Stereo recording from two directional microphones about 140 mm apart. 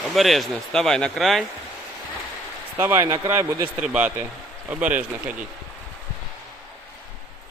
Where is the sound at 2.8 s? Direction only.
20° right (ahead or behind).